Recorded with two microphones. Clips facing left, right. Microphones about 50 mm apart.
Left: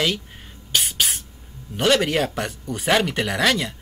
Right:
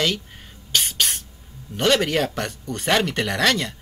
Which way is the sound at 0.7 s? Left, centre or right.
Centre.